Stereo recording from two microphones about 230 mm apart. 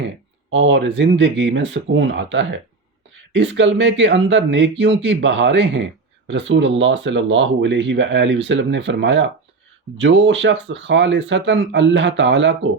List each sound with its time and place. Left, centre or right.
0.5 s speech: right